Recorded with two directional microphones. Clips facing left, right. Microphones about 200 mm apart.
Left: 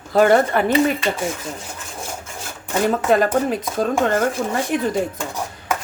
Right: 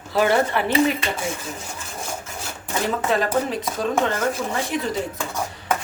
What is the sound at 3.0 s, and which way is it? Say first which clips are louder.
Speech: left 3 dB; 50° left (ahead or behind).